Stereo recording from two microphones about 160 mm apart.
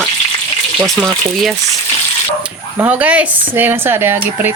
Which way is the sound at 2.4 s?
10° right (ahead or behind).